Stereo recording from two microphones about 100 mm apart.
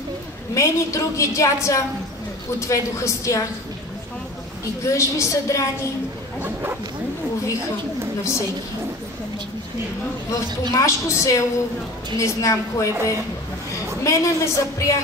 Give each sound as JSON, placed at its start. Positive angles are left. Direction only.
{"t": 0.6, "sound": "a woman's voice", "side_deg": 30}
{"t": 4.8, "sound": "a woman's voice", "side_deg": 30}
{"t": 6.4, "sound": "bow-wow", "side_deg": -20}
{"t": 8.2, "sound": "a woman's voice", "side_deg": 30}
{"t": 10.7, "sound": "a woman's voice", "side_deg": 30}
{"t": 14.0, "sound": "a woman's voice", "side_deg": 30}